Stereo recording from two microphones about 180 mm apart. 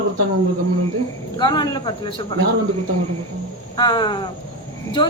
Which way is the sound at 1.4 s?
25° left (ahead or behind).